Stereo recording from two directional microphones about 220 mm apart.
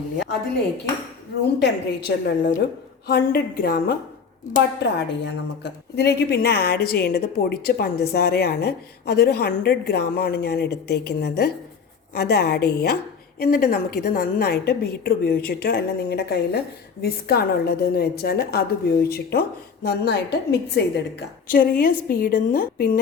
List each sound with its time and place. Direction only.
1.5 s a woman's voice: 50° left (ahead or behind)